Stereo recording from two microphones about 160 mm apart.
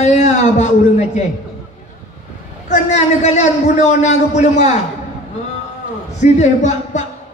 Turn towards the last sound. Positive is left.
turn(degrees=45)  # may be behind; listen again after turning